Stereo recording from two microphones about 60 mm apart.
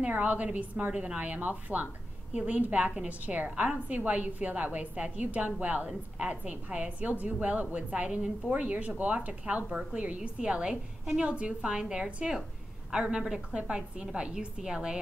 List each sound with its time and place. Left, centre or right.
0.0 s a woman's voice: right